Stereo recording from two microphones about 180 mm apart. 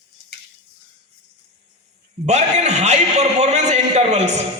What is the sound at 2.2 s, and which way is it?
A man's voice, 40° right (ahead or behind).